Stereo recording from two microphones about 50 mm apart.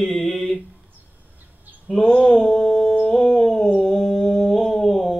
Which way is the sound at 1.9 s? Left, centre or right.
Left.